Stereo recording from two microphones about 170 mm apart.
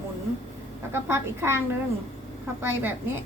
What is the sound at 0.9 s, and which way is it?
A woman's voice, 15° right (ahead or behind).